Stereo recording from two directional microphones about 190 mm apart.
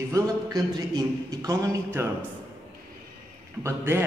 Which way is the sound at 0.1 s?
20° right (ahead or behind).